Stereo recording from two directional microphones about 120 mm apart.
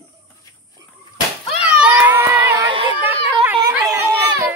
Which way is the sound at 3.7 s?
20° right (ahead or behind).